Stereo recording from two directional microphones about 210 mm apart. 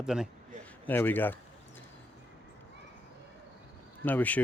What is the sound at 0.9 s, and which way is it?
Speech, 10° left (ahead or behind).